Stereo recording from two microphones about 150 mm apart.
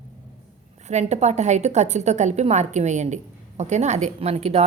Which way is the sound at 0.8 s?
50° right (ahead or behind).